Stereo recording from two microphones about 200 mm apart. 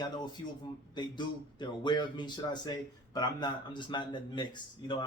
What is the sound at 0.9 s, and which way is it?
Speech, 20° left (ahead or behind).